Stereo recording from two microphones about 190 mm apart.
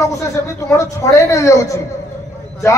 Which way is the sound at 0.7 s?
15° left (ahead or behind).